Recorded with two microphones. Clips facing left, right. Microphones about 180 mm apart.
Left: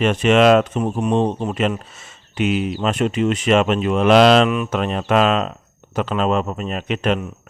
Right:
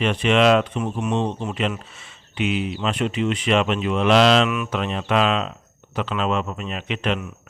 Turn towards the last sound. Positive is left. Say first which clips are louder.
# left 4 dB
turn(degrees=40)  # may be behind; listen again after turning